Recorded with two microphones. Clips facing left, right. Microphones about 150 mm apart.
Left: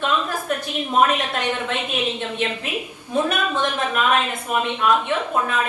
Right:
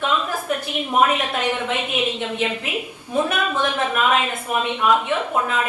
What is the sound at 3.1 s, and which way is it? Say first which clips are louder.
A woman's voice: even; 10° right (ahead or behind).